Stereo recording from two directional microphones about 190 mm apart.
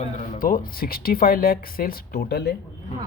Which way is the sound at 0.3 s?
45° left (ahead or behind).